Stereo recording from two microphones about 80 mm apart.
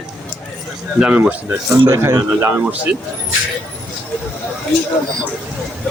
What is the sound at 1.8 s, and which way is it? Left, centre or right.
Speech, right.